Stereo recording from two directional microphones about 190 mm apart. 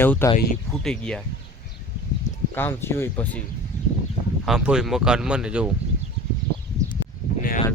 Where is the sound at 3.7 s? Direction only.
40° left (ahead or behind).